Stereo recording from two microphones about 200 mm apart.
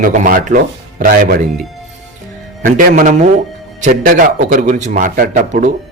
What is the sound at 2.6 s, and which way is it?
Speech, 40° right (ahead or behind).